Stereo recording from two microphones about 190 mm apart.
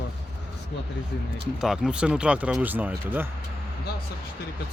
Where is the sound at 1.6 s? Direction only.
5° right (ahead or behind).